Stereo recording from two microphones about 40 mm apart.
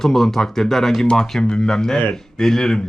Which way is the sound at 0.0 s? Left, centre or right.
Centre.